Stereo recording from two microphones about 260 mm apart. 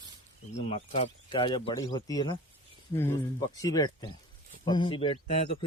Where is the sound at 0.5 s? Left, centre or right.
Left.